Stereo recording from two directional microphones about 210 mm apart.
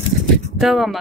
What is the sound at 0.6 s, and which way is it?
Speech, centre (ahead or behind).